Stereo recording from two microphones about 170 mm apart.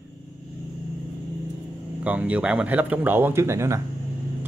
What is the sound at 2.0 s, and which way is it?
Speech, 10° right (ahead or behind).